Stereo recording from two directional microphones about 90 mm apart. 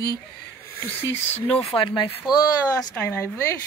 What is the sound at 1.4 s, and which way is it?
Speech, 80° left.